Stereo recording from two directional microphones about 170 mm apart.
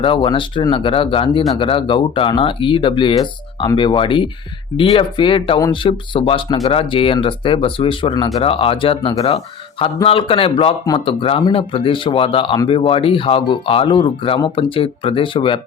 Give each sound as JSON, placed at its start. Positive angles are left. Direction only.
{"t": 0.0, "sound": "speech", "side_deg": 30}